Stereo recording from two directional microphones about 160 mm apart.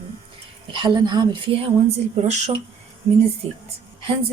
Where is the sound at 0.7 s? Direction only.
30° right (ahead or behind).